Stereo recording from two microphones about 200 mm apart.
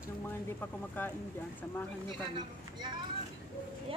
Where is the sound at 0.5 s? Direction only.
10° left (ahead or behind).